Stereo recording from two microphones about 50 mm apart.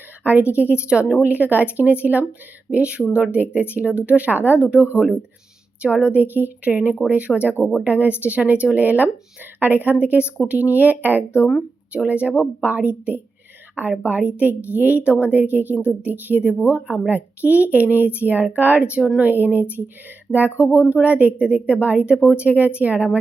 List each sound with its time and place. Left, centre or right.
0.5 s speech: right
1.2 s a woman's voice: right
15.6 s a woman's voice: left
16.0 s a woman's voice: right
19.2 s a woman's voice: right